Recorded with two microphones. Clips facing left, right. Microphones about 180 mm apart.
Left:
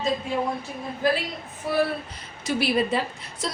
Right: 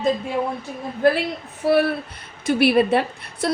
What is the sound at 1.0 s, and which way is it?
Speech, 60° right (ahead or behind).